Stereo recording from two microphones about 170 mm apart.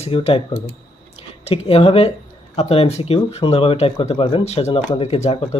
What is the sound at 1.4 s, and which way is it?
Speech, 35° left (ahead or behind).